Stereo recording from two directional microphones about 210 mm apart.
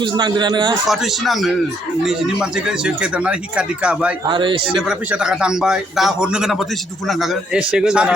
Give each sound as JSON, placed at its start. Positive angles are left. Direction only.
{"t": 0.0, "sound": "a man's voice", "side_deg": -20}
{"t": 0.9, "sound": "a man's voice", "side_deg": 0}
{"t": 4.3, "sound": "a man's voice", "side_deg": -25}
{"t": 4.9, "sound": "a man's voice", "side_deg": -5}